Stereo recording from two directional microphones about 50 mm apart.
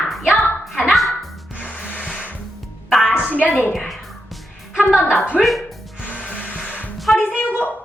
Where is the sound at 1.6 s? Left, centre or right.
Left.